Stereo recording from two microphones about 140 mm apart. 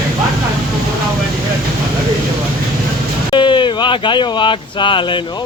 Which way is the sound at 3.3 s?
35° left (ahead or behind).